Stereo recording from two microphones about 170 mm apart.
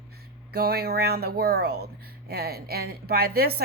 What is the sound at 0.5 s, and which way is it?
A woman's voice, 65° right (ahead or behind).